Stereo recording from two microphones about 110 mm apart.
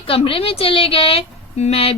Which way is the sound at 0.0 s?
55° left (ahead or behind).